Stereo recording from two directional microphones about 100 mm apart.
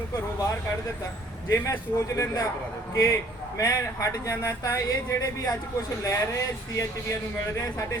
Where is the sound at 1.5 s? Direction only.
30° left (ahead or behind).